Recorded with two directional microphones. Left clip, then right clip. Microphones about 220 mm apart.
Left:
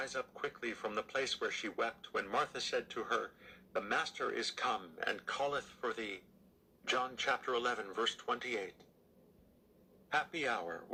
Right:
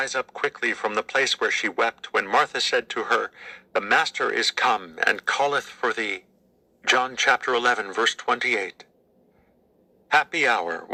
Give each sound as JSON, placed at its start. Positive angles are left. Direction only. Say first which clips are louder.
{"t": 0.0, "sound": "speech", "louder": "right 15 dB", "side_deg": -35}
{"t": 10.1, "sound": "speech", "louder": "right 16 dB", "side_deg": -35}